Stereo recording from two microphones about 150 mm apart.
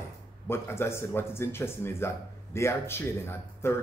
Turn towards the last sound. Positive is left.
turn(degrees=15)  # may be behind; listen again after turning